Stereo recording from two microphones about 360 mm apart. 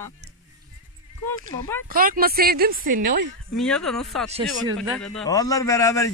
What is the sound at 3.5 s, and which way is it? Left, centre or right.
A man's voice, centre.